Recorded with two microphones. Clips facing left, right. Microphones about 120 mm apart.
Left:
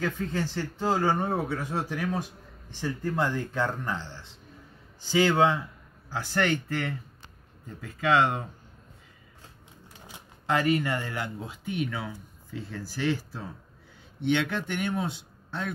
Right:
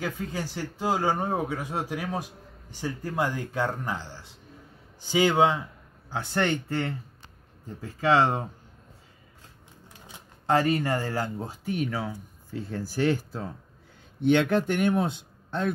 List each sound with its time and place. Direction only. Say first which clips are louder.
0.0 s speech: left 2 dB; 10° right (ahead or behind); by 8.5 s 35° right (ahead or behind)
10.4 s speech: right 2 dB; 30° right (ahead or behind); by 15.7 s 50° right (ahead or behind)